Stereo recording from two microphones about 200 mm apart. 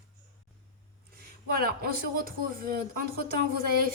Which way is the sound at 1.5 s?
50° right (ahead or behind).